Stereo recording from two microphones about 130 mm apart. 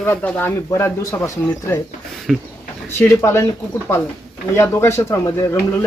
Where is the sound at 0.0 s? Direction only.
10° left (ahead or behind).